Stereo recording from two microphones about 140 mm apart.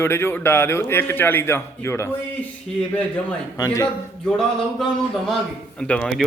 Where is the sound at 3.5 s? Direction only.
25° left (ahead or behind).